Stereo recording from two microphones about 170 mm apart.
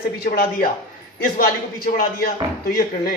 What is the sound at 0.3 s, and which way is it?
A man's voice, 55° left (ahead or behind).